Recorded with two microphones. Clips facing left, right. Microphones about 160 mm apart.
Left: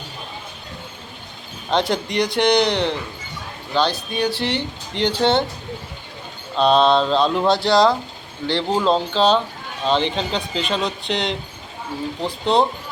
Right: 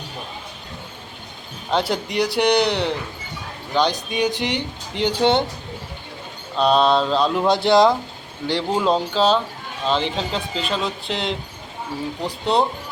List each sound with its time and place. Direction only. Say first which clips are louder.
1.7 s speech: left 1 dB; 5° right (ahead or behind)
6.6 s speech: left 1 dB; 5° right (ahead or behind)
7.4 s speech: right 2 dB; 20° right (ahead or behind)
8.7 s speech: left 1 dB; 5° right (ahead or behind)